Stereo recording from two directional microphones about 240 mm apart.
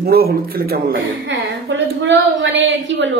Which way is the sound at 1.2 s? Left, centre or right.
Right.